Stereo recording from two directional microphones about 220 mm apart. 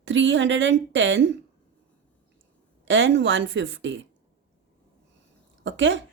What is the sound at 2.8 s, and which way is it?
Speech, 55° right (ahead or behind).